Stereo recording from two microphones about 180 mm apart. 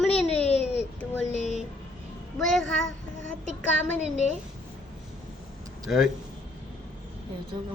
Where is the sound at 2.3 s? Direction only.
Centre (ahead or behind).